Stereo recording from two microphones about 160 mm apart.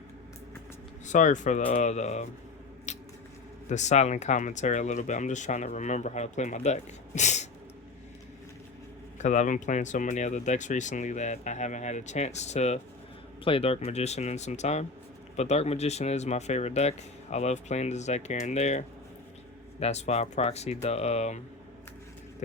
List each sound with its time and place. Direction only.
1.0 s speech: 50° left (ahead or behind)
2.9 s squish: 45° left (ahead or behind)
3.7 s speech: 45° left (ahead or behind)
9.1 s speech: 50° left (ahead or behind)